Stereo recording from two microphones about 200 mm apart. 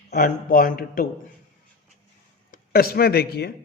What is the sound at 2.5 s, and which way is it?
Speech, 50° left (ahead or behind).